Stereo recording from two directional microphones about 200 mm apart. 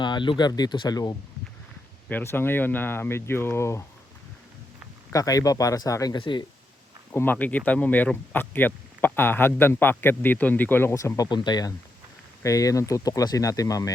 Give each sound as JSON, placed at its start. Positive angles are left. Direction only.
{"t": 0.0, "sound": "speech", "side_deg": 25}
{"t": 5.1, "sound": "speech", "side_deg": 15}
{"t": 7.1, "sound": "speech", "side_deg": 10}